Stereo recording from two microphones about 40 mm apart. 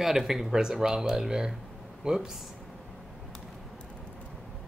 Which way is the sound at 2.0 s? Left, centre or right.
Centre.